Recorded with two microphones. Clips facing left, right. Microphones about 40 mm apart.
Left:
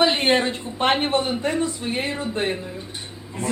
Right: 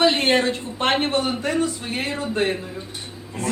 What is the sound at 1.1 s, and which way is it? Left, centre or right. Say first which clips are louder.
A woman's voice: even; left.